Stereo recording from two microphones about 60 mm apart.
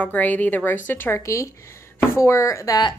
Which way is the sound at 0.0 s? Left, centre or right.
Left.